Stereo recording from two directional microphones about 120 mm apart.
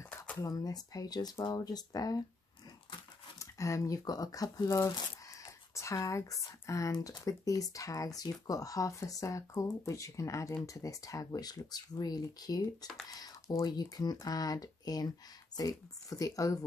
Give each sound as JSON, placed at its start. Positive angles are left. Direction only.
{"t": 0.0, "sound": "a sound", "side_deg": 20}
{"t": 0.5, "sound": "speech", "side_deg": 30}
{"t": 3.3, "sound": "speech", "side_deg": 25}